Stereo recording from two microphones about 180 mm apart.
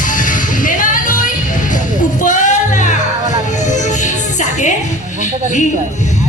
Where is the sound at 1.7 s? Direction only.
45° left (ahead or behind).